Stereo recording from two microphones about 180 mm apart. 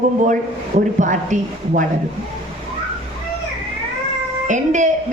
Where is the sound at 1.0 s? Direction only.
45° right (ahead or behind).